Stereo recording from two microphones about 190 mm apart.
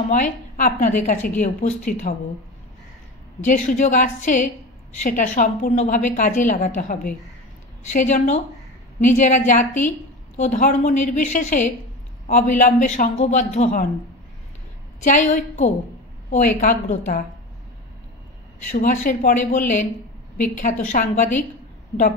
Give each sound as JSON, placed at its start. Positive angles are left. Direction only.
{"t": 0.1, "sound": "a woman's voice", "side_deg": 40}
{"t": 3.3, "sound": "a woman's voice", "side_deg": 40}
{"t": 15.0, "sound": "a woman's voice", "side_deg": 40}
{"t": 18.7, "sound": "a woman's voice", "side_deg": 40}